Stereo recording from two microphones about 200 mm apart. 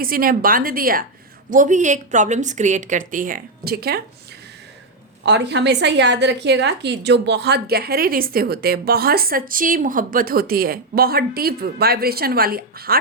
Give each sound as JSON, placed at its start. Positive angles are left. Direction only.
{"t": 0.0, "sound": "a woman's voice", "side_deg": -45}
{"t": 5.2, "sound": "a woman's voice", "side_deg": -60}